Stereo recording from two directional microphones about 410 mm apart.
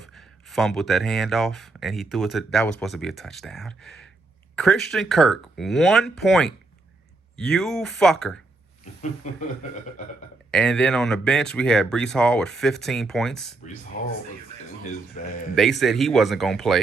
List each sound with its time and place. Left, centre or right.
0.0 s speech: centre
8.8 s speech: centre
10.5 s speech: centre
15.1 s a man's voice: centre
15.5 s speech: centre